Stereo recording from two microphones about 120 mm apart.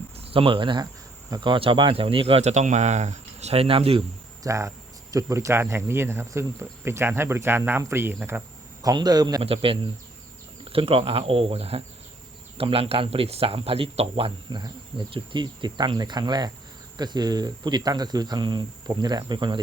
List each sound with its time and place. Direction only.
0.3 s speech: 50° right (ahead or behind)
4.4 s speech: 25° right (ahead or behind)
8.8 s speech: 35° right (ahead or behind)
9.4 s speech: 50° right (ahead or behind)